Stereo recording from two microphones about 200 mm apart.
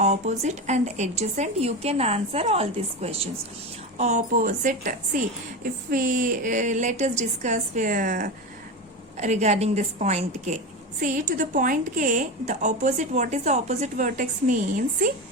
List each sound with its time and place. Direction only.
0.0 s a woman's voice: 35° right (ahead or behind)